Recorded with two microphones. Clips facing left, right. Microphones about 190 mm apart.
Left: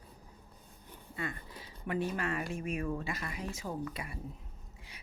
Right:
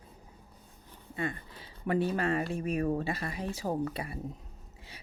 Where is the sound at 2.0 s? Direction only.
30° right (ahead or behind).